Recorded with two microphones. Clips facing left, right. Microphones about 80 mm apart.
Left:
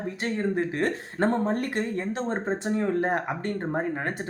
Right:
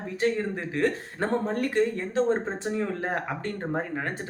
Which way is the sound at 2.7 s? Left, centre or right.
Left.